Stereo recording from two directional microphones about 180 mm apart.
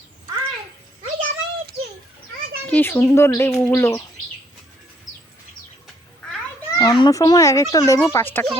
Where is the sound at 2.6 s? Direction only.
10° left (ahead or behind).